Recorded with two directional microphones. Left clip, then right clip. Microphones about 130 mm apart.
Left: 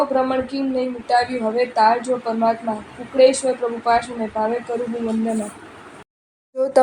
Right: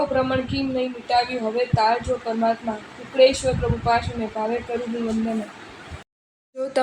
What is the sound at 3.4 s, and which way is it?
Speech, 50° left (ahead or behind).